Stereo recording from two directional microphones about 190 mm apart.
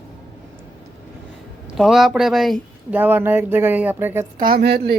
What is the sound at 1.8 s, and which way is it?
Speech, centre (ahead or behind).